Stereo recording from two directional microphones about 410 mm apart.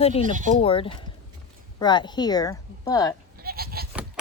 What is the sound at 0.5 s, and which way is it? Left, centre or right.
Speech, centre.